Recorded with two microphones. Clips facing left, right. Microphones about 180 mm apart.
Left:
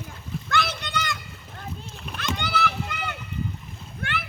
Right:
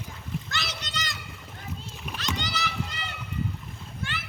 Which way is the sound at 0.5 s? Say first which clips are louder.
Left 9 dB; 55° left (ahead or behind).